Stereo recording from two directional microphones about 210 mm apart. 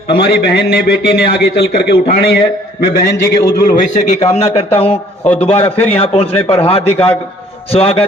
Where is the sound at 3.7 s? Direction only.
35° left (ahead or behind).